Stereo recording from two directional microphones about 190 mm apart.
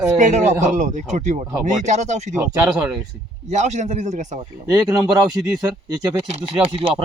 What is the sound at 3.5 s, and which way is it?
Speech, 40° right (ahead or behind).